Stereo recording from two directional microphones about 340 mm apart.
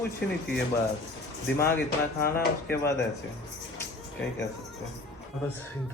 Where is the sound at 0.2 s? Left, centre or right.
Left.